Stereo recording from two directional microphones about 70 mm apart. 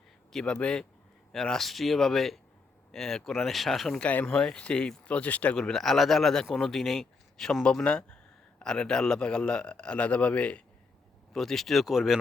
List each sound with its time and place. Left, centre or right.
0.3 s a man's voice: centre
3.9 s speech: left
4.3 s a man's voice: centre
5.5 s a man's voice: centre
11.3 s speech: centre